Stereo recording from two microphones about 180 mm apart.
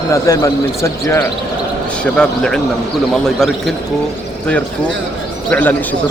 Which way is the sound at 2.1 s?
5° left (ahead or behind).